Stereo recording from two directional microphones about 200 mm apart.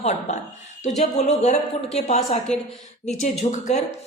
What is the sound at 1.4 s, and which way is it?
A woman's voice, 35° left (ahead or behind).